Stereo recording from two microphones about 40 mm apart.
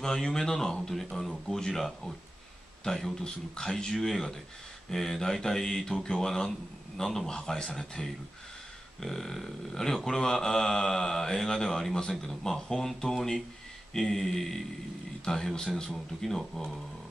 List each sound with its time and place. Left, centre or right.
0.0 s mantra: centre
2.8 s a man's voice: centre
3.1 s mantra: centre
9.0 s speech: centre
10.0 s mantra: centre
11.9 s speech: centre
12.3 s mantra: centre